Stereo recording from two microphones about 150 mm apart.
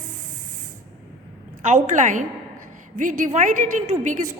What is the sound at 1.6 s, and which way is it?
A woman's voice, 55° right (ahead or behind).